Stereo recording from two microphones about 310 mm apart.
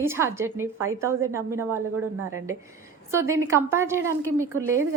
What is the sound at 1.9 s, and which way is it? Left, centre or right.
Speech, right.